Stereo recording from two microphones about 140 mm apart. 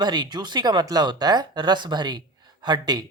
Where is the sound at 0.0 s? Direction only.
30° right (ahead or behind).